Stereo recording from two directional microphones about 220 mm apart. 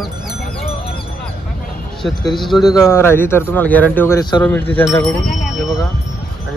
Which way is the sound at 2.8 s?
10° left (ahead or behind).